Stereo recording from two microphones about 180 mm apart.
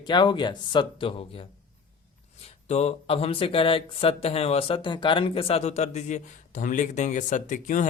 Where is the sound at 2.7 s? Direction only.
35° left (ahead or behind).